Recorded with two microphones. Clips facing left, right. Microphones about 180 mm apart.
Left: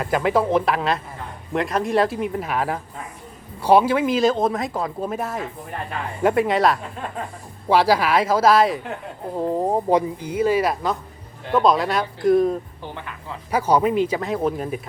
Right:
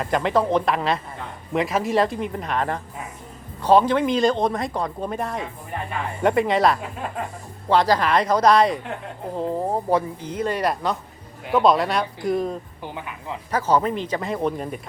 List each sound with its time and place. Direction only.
0.0 s speech: 5° left (ahead or behind)
9.3 s speech: 15° left (ahead or behind)
12.8 s speech: 15° right (ahead or behind)
13.5 s speech: 10° left (ahead or behind)